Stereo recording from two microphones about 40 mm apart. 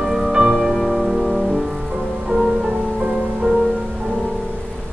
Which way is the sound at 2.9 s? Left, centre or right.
Centre.